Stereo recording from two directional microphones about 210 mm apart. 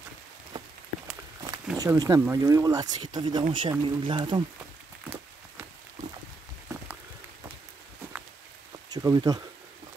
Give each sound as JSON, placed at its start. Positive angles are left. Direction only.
{"t": 1.8, "sound": "speech", "side_deg": -15}
{"t": 6.7, "sound": "a sound", "side_deg": -15}
{"t": 8.9, "sound": "speech", "side_deg": -15}